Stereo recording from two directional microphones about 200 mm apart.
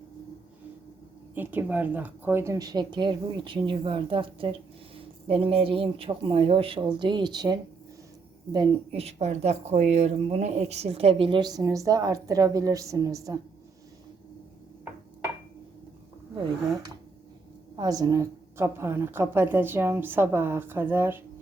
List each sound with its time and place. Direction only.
1.4 s speech: 10° right (ahead or behind)
17.7 s a woman's voice: 20° right (ahead or behind)